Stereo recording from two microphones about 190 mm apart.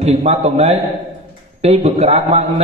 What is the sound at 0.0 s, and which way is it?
A man's voice, 35° right (ahead or behind).